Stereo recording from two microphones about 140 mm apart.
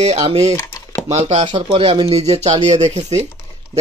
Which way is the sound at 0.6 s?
20° left (ahead or behind).